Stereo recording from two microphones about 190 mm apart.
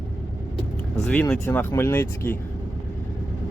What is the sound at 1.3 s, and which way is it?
Speech, 10° left (ahead or behind).